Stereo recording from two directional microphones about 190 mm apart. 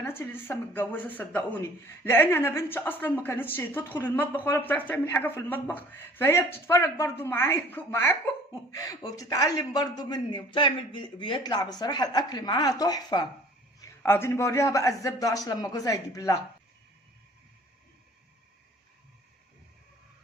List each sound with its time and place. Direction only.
0.0 s a woman's voice: 10° left (ahead or behind)